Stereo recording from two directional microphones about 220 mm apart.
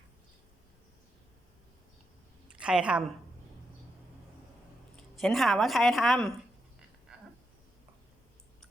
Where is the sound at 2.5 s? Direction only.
5° right (ahead or behind).